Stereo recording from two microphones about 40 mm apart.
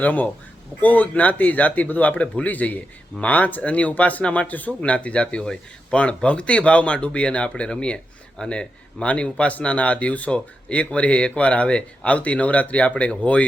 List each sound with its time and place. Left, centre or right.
0.0 s speech: left